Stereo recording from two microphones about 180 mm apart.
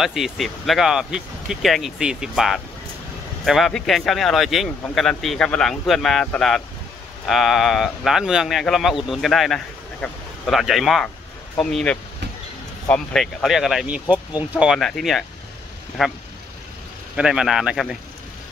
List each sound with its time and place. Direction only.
0.0 s speech: centre (ahead or behind)